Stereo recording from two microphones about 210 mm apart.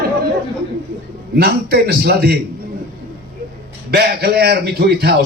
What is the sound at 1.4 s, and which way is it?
Speech, 50° right (ahead or behind).